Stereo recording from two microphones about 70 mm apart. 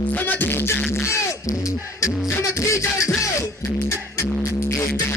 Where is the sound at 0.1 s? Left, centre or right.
Left.